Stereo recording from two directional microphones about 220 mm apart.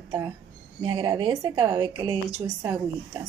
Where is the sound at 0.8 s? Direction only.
20° right (ahead or behind).